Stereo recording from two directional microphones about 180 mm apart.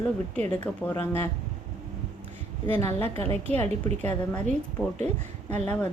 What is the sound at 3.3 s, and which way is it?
A woman's voice, 10° left (ahead or behind).